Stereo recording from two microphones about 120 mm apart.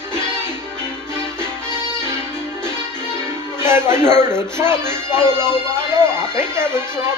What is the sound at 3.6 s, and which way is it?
Speech, 20° right (ahead or behind).